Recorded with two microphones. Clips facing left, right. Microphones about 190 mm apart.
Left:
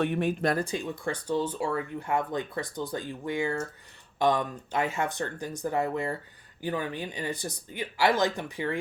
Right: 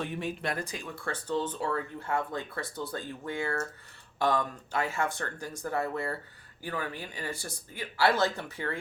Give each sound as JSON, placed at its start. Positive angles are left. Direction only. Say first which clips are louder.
{"t": 0.0, "sound": "speech", "louder": "left 8 dB", "side_deg": 60}
{"t": 0.4, "sound": "speech", "louder": "left 7 dB", "side_deg": 30}